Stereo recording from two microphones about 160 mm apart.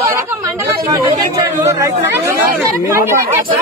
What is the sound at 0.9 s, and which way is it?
Speech, 20° right (ahead or behind).